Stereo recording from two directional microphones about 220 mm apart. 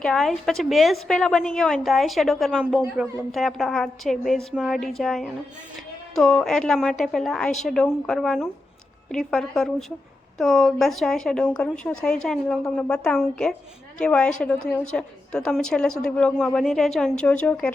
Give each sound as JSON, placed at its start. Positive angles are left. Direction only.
{"t": 0.0, "sound": "a woman's voice", "side_deg": 0}